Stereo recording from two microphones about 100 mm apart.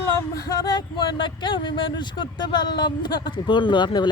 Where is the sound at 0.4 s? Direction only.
40° left (ahead or behind).